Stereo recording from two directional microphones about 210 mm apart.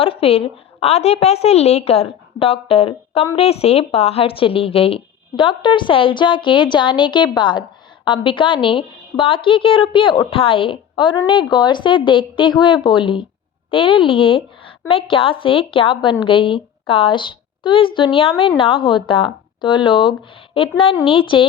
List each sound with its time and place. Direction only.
0.0 s speech: 25° left (ahead or behind)